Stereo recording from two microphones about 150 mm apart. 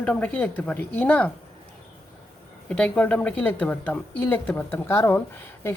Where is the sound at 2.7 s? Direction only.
5° left (ahead or behind).